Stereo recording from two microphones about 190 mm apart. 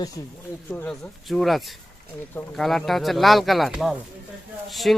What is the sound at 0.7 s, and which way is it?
Speech, 10° left (ahead or behind).